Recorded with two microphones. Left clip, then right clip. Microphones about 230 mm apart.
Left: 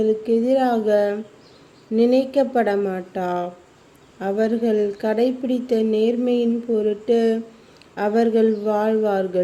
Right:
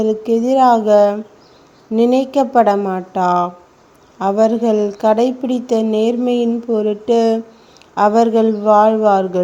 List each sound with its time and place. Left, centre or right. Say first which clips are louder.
0.0 s a woman's voice: right 3 dB; centre
2.7 s a woman's voice: right 4 dB; right
3.1 s a woman's voice: right 9 dB; centre